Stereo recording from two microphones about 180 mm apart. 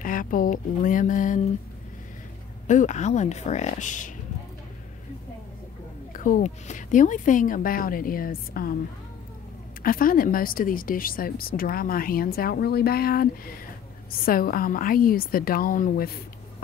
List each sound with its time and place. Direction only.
0.0 s speech: 50° left (ahead or behind)
2.6 s speech: 45° left (ahead or behind)
6.1 s speech: 45° left (ahead or behind)
9.8 s speech: 50° left (ahead or behind)